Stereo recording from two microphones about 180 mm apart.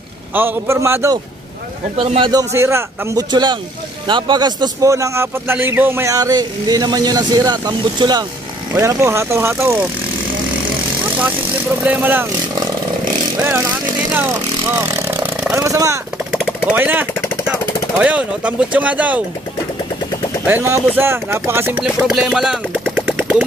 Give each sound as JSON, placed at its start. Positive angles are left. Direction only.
{"t": 0.3, "sound": "speech", "side_deg": -15}
{"t": 2.0, "sound": "a man's voice", "side_deg": -30}
{"t": 2.5, "sound": "a man's voice", "side_deg": -15}
{"t": 11.8, "sound": "speech", "side_deg": -10}
{"t": 20.4, "sound": "speech", "side_deg": -10}